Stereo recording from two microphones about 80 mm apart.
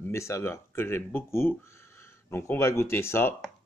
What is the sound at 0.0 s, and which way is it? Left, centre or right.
Speech, left.